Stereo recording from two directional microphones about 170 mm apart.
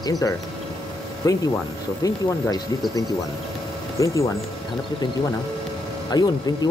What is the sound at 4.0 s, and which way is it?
Speech, 20° left (ahead or behind).